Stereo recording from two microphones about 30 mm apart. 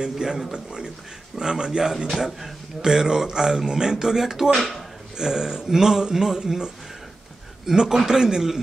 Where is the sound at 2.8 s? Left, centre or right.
Right.